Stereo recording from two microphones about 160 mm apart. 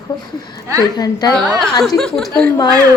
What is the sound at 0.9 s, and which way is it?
Speech, 25° left (ahead or behind).